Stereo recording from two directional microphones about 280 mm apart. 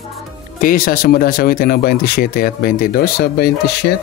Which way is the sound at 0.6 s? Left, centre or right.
Left.